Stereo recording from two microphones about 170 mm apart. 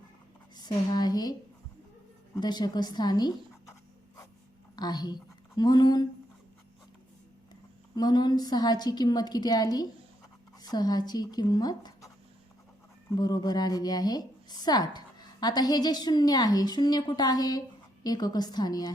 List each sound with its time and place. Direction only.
0.5 s a woman's voice: 25° left (ahead or behind)
4.8 s a woman's voice: 25° left (ahead or behind)
7.9 s a woman's voice: 25° left (ahead or behind)
13.1 s a woman's voice: 25° left (ahead or behind)